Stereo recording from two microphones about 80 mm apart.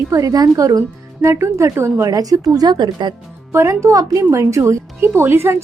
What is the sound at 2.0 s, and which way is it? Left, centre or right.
Speech, right.